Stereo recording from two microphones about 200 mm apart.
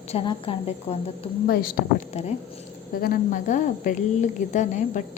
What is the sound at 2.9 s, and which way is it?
A woman's voice, 45° left (ahead or behind).